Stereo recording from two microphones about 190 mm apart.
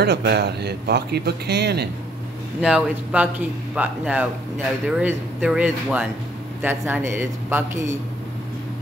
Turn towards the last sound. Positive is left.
turn(degrees=-15)  # may be behind; listen again after turning